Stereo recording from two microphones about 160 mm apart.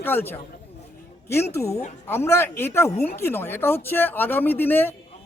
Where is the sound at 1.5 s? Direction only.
20° left (ahead or behind).